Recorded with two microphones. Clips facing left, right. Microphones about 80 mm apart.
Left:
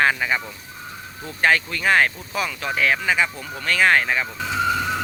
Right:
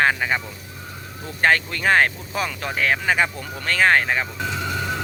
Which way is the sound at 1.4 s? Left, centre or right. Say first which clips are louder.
Even; right.